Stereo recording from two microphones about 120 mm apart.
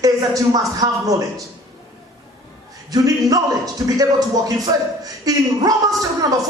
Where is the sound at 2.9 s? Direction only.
30° right (ahead or behind).